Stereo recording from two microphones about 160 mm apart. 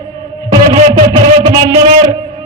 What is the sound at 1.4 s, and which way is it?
Speech, 35° right (ahead or behind).